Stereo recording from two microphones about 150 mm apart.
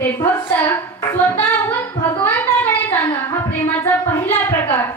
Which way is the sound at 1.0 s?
10° left (ahead or behind).